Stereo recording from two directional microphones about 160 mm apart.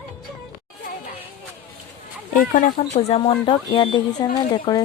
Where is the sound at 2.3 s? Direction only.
60° left (ahead or behind).